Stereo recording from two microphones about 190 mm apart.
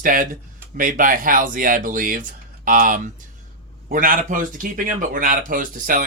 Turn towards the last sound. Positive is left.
turn(degrees=-45)  # may be behind; listen again after turning